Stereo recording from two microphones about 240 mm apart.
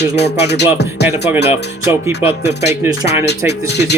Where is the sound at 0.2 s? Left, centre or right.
Left.